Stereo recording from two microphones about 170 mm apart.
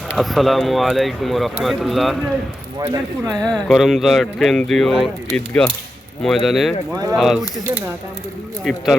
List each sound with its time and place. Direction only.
0.1 s speech: centre (ahead or behind)
2.8 s speech: 20° right (ahead or behind)
3.4 s speech: centre (ahead or behind)